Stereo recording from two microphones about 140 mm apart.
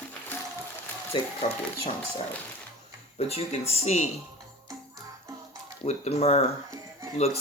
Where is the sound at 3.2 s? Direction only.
45° left (ahead or behind).